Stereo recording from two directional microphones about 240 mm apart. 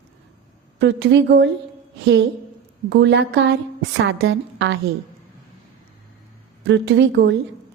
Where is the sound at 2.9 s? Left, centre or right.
Right.